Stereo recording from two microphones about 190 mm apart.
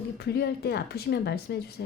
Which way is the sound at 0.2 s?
60° left (ahead or behind).